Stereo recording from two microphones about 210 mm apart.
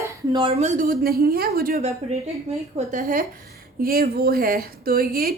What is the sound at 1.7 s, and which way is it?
A woman's voice, 30° right (ahead or behind).